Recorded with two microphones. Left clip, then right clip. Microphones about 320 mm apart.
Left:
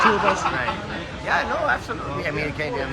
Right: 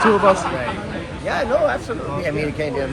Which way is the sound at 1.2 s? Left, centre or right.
Centre.